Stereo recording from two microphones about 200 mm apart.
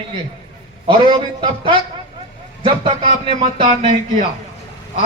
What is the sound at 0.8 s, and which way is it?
Speech, 25° right (ahead or behind).